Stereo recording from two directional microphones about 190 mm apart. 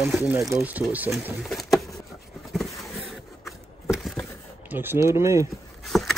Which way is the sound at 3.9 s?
Centre (ahead or behind).